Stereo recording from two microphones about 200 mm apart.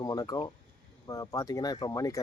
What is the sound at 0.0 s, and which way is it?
Speech, 20° left (ahead or behind).